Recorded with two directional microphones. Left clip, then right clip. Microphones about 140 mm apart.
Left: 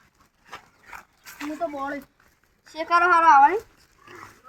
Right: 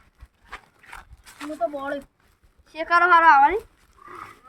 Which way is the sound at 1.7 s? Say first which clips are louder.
Right 1 dB; 40° right (ahead or behind).